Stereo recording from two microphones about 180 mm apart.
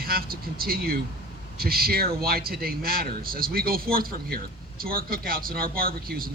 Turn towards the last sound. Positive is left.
turn(degrees=-55)  # may be behind; listen again after turning